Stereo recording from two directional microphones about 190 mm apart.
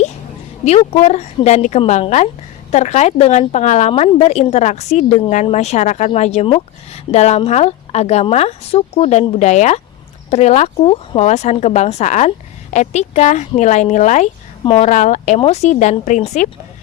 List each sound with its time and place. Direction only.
0.6 s speech: 35° left (ahead or behind)